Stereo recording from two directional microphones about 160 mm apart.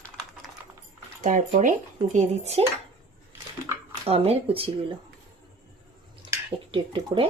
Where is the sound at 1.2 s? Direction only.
55° right (ahead or behind).